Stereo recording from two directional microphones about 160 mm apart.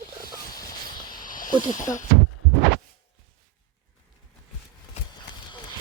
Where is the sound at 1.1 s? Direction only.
60° left (ahead or behind).